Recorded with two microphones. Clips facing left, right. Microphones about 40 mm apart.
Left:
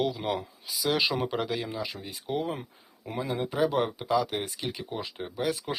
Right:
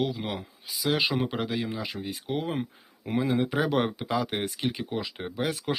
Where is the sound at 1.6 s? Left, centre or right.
Right.